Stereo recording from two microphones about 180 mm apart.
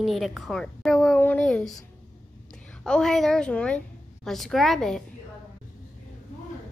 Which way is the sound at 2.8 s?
5° left (ahead or behind).